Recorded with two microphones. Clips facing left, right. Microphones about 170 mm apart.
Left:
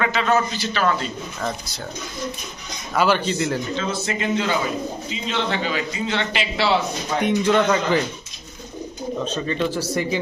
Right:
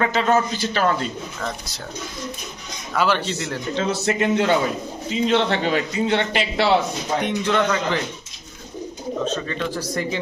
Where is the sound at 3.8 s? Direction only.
65° right (ahead or behind); by 6.7 s 50° right (ahead or behind).